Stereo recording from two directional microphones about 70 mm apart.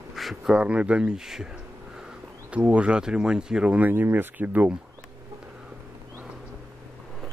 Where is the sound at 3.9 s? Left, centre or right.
Right.